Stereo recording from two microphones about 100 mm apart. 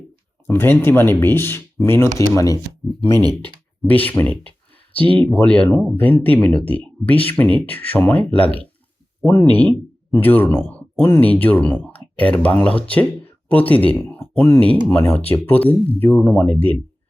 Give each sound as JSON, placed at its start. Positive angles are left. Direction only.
{"t": 0.4, "sound": "speech", "side_deg": 25}
{"t": 3.2, "sound": "speech", "side_deg": -45}
{"t": 3.8, "sound": "speech", "side_deg": 15}
{"t": 9.2, "sound": "speech", "side_deg": 5}
{"t": 9.6, "sound": "speech", "side_deg": 20}